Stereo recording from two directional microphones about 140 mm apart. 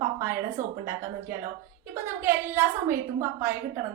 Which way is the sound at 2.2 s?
20° right (ahead or behind).